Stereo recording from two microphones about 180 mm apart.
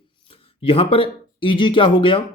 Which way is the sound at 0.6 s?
30° left (ahead or behind).